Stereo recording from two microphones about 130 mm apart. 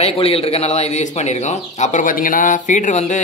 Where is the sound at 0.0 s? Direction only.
50° left (ahead or behind).